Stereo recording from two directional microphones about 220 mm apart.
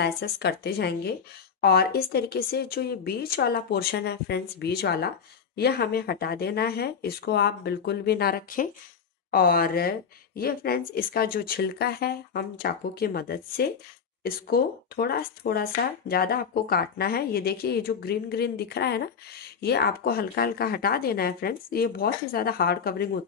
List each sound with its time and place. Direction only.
0.0 s speech: 50° left (ahead or behind)